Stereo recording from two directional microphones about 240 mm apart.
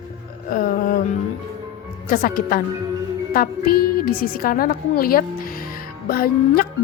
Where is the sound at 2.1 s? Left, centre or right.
Left.